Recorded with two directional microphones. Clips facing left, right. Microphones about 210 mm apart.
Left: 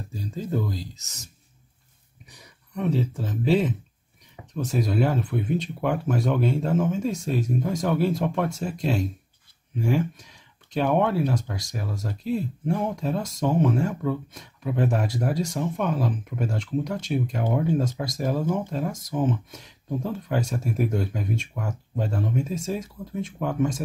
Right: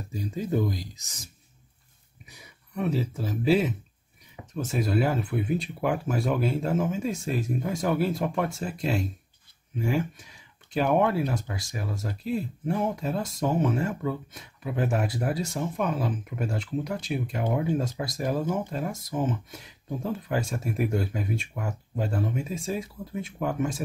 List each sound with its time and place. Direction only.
0.1 s speech: 15° right (ahead or behind)
2.3 s speech: 5° right (ahead or behind)